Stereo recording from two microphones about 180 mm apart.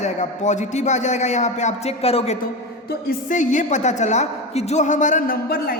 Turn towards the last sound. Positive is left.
turn(degrees=55)  # may be behind; listen again after turning